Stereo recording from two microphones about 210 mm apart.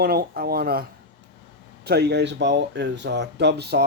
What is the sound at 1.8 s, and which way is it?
Speech, 50° right (ahead or behind).